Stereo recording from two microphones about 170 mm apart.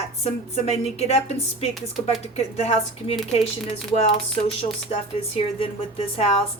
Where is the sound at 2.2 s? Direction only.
40° left (ahead or behind).